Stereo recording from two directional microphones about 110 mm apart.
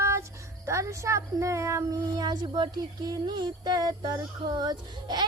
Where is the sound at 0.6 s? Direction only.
30° right (ahead or behind).